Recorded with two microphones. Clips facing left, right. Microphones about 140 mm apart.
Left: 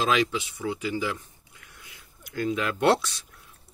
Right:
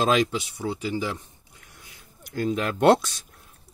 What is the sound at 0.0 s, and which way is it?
Speech, 45° right (ahead or behind).